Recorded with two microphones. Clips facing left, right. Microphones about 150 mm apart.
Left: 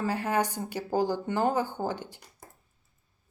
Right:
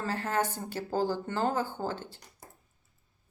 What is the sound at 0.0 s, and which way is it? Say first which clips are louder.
Speech: left 3 dB; 15° left (ahead or behind).